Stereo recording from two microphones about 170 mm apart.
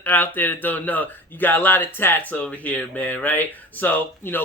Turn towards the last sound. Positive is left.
turn(degrees=10)  # may be behind; listen again after turning